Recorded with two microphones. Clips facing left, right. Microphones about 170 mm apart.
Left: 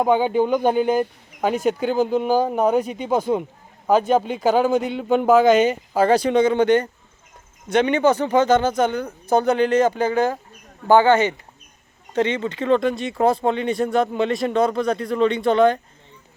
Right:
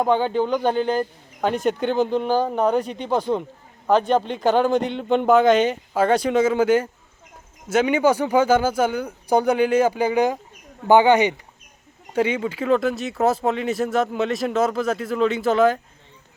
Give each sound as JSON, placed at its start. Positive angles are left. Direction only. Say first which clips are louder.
{"t": 0.0, "sound": "speech", "louder": "left 2 dB", "side_deg": 10}